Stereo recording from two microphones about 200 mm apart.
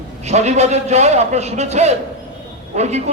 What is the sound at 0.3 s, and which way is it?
A man's voice, 35° right (ahead or behind).